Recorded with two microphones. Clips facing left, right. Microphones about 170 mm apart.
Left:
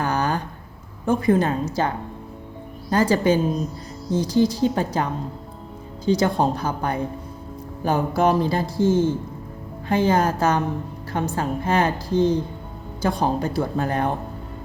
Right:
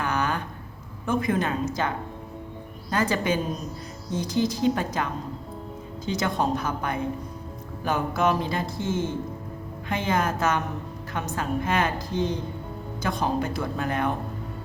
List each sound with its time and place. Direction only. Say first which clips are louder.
0.0 s a sound: left 4 dB; 35° left (ahead or behind)
1.0 s speech: left 6 dB; 35° left (ahead or behind)
2.9 s speech: left 6 dB; 35° left (ahead or behind)
6.1 s speech: left 6 dB; 35° left (ahead or behind)